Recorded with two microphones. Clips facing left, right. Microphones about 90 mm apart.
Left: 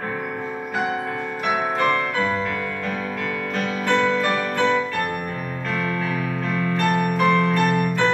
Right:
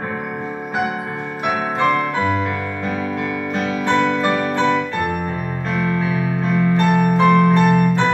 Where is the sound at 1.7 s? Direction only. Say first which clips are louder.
Right 3 dB; 15° right (ahead or behind).